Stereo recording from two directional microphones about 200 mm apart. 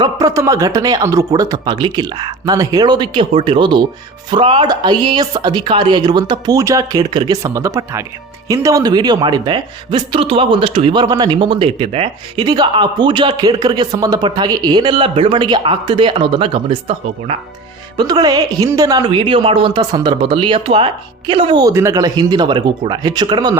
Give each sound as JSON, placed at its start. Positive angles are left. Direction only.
{"t": 0.0, "sound": "speech", "side_deg": -15}
{"t": 17.9, "sound": "speech", "side_deg": -20}